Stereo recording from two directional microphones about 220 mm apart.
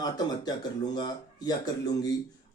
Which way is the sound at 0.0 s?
20° left (ahead or behind).